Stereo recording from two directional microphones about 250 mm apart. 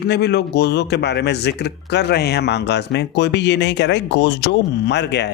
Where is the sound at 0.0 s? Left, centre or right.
Left.